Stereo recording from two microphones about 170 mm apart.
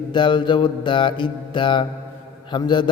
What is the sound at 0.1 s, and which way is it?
A man's voice, 25° left (ahead or behind).